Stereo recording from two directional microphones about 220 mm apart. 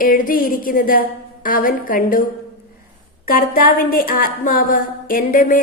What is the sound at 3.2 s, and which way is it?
A woman's voice, 40° left (ahead or behind).